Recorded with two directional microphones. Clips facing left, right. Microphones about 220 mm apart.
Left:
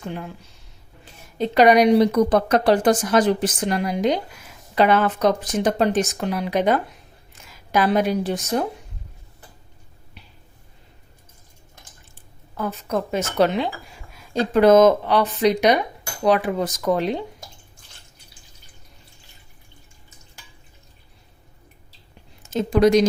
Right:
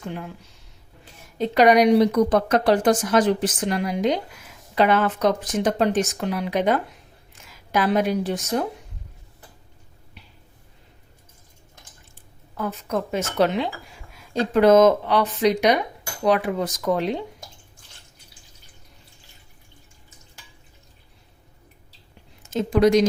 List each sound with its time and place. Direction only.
1.4 s speech: 30° left (ahead or behind)
12.5 s speech: 35° left (ahead or behind)
22.4 s speech: 35° left (ahead or behind)